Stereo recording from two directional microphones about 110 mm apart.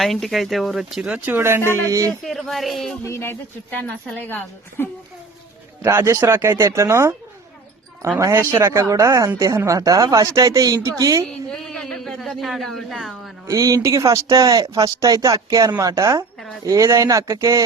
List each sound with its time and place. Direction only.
0.0 s speech: centre (ahead or behind); by 2.1 s 30° right (ahead or behind)
2.2 s speech: centre (ahead or behind)
3.0 s a woman's voice: 25° left (ahead or behind)
5.8 s speech: 20° right (ahead or behind)
8.2 s speech: 25° right (ahead or behind)
11.3 s a man's voice: 5° left (ahead or behind)
13.5 s speech: 35° right (ahead or behind)